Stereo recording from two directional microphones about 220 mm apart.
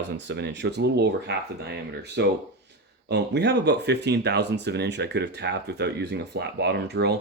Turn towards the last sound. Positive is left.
turn(degrees=-50)  # may be behind; listen again after turning